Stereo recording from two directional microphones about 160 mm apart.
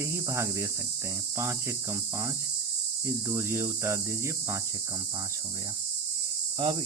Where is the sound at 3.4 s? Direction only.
20° right (ahead or behind).